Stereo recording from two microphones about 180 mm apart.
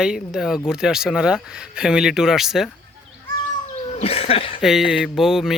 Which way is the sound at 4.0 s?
35° left (ahead or behind).